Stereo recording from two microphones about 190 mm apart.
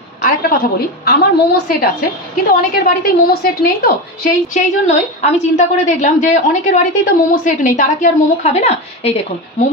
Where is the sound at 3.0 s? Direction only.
50° left (ahead or behind).